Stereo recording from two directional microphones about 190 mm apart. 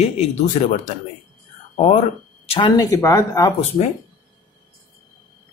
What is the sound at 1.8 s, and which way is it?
Speech, 35° left (ahead or behind).